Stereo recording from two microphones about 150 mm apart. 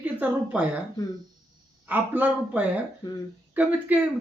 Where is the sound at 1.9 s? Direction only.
10° right (ahead or behind).